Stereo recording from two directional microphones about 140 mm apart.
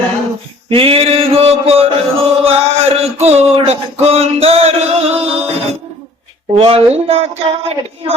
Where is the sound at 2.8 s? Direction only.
50° right (ahead or behind).